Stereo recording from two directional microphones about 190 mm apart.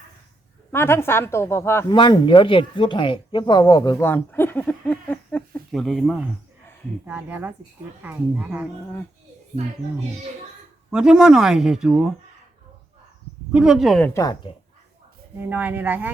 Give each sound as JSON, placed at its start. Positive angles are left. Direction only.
{"t": 0.7, "sound": "speech", "side_deg": 10}
{"t": 2.0, "sound": "speech", "side_deg": 25}
{"t": 7.0, "sound": "speech", "side_deg": -10}
{"t": 10.9, "sound": "speech", "side_deg": -5}
{"t": 13.5, "sound": "speech", "side_deg": -5}
{"t": 14.1, "sound": "speech", "side_deg": 20}
{"t": 15.4, "sound": "speech", "side_deg": -10}